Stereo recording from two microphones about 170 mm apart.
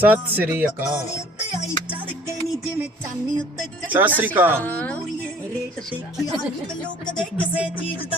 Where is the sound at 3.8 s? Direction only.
10° right (ahead or behind).